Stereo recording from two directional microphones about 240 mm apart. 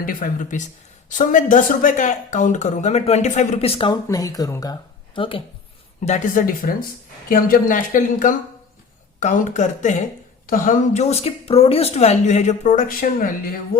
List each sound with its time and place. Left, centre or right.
0.0 s speech: left